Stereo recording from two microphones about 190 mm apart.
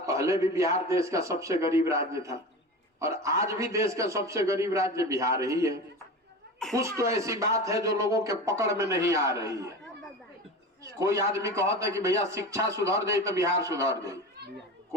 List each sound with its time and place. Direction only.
0.0 s a man's voice: 15° right (ahead or behind)
10.9 s a man's voice: 15° right (ahead or behind)